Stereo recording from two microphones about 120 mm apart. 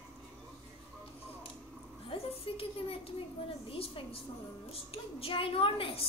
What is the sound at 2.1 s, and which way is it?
Speech, 50° left (ahead or behind).